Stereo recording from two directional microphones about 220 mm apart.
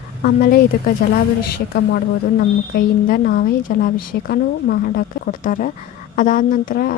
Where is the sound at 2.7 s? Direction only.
40° left (ahead or behind).